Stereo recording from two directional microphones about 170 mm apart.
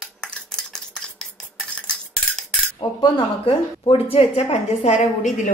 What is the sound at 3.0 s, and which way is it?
A woman's voice, 30° left (ahead or behind).